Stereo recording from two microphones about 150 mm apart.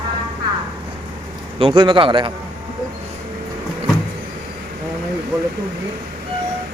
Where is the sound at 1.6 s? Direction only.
35° right (ahead or behind).